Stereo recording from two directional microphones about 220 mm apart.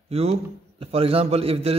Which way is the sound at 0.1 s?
25° right (ahead or behind).